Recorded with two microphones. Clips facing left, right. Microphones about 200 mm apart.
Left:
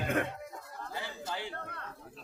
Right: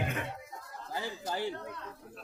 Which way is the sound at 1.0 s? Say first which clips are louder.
Right 7 dB; 45° right (ahead or behind).